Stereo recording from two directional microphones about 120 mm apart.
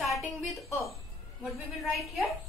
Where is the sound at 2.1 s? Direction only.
Centre (ahead or behind).